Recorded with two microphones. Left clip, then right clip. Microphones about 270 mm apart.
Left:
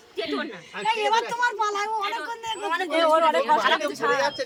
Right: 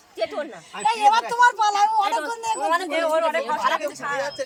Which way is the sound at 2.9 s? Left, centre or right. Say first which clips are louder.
Left 2 dB; left.